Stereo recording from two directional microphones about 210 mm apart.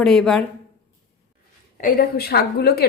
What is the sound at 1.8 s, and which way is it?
A woman's voice, 45° left (ahead or behind).